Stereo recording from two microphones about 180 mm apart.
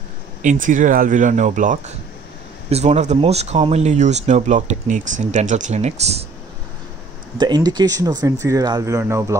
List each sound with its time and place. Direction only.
0.4 s speech: 45° right (ahead or behind)
7.3 s speech: 25° right (ahead or behind)